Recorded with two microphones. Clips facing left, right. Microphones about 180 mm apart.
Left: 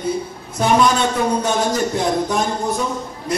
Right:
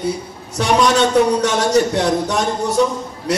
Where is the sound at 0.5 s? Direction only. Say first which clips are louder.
Right 1 dB; 80° right.